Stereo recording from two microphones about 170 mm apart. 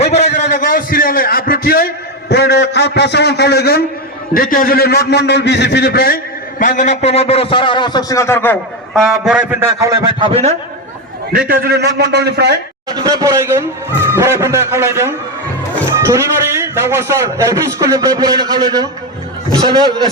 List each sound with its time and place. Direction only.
0.0 s a sound: 40° left (ahead or behind)
0.3 s a man's voice: 55° left (ahead or behind)
2.3 s a man's voice: 75° left (ahead or behind)
4.4 s a man's voice: 55° left (ahead or behind)
6.6 s a man's voice: 50° left (ahead or behind); by 8.5 s 15° left (ahead or behind)
8.9 s a man's voice: centre (ahead or behind); by 10.5 s 35° right (ahead or behind)
11.3 s a man's voice: 60° right (ahead or behind)
12.9 s a man's voice: 20° right (ahead or behind)